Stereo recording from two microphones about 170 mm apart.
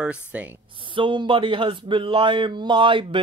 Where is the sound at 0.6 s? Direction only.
30° right (ahead or behind).